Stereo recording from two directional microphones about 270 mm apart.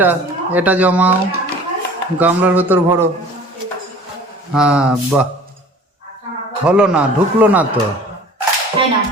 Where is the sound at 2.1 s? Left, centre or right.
Centre.